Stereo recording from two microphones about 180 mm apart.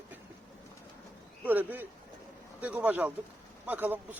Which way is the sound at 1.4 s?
10° right (ahead or behind).